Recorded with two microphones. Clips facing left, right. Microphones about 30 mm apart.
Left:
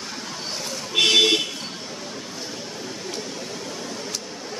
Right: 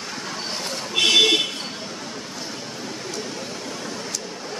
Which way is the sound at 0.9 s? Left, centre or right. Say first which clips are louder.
Even; centre.